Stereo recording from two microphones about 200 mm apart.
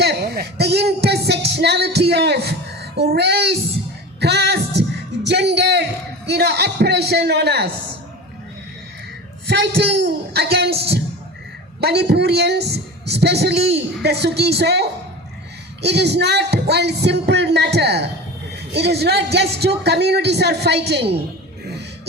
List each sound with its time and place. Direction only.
0.0 s speech: 55° right (ahead or behind)
4.2 s music: 55° right (ahead or behind)
6.2 s a man's voice: 55° right (ahead or behind)
9.5 s a man's voice: 55° right (ahead or behind)
11.8 s a man's voice: 55° right (ahead or behind)